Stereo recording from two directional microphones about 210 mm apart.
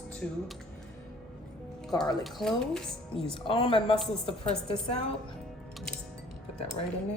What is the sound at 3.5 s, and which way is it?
A woman's voice, 25° left (ahead or behind).